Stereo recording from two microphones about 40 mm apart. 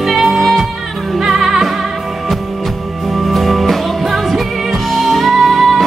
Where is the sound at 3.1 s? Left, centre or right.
Centre.